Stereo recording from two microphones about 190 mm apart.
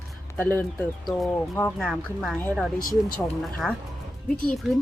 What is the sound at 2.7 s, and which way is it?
Speech, 50° left (ahead or behind).